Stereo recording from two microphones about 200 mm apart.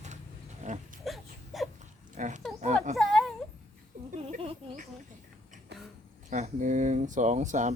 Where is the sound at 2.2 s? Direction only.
40° right (ahead or behind).